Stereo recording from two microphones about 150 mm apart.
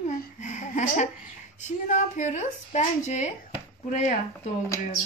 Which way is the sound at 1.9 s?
55° left (ahead or behind).